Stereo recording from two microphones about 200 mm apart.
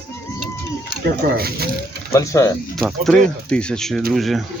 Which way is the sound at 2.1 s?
15° left (ahead or behind).